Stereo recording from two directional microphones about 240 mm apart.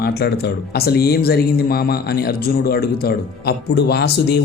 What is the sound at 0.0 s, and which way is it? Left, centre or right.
Speech, left.